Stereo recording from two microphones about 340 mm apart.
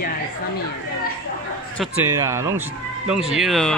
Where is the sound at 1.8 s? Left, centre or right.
Centre.